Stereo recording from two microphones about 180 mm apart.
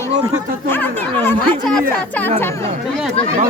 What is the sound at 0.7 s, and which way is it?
Speech, 10° left (ahead or behind).